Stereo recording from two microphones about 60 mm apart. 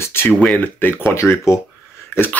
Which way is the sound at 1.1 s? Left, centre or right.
Left.